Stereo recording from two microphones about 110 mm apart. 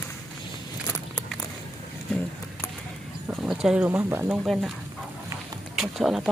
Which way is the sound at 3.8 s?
20° right (ahead or behind).